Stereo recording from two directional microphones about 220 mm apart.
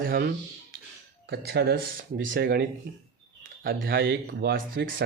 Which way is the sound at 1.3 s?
45° right (ahead or behind).